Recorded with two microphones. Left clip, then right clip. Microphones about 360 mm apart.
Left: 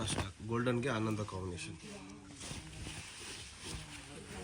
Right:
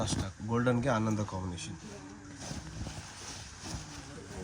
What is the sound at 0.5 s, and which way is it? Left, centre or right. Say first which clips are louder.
Speech: right 5 dB; right.